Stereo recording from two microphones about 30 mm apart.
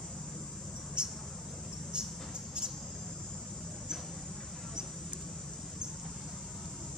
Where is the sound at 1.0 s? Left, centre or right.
Right.